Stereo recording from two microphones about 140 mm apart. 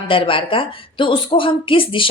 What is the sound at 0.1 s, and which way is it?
A woman's voice, 40° left (ahead or behind).